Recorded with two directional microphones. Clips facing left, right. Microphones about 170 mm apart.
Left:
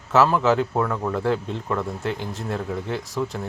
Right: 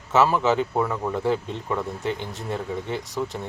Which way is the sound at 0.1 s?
Centre (ahead or behind).